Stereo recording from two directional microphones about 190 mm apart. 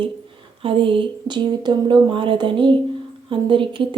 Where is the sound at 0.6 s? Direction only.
30° right (ahead or behind).